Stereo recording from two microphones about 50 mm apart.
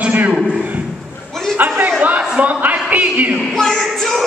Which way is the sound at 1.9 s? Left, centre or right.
Right.